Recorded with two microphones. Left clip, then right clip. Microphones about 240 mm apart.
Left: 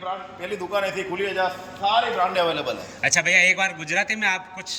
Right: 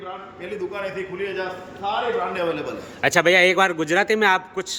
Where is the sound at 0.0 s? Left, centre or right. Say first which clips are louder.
Left 3 dB; left.